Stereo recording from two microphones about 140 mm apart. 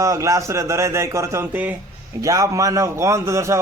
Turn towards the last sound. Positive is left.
turn(degrees=-20)  # may be behind; listen again after turning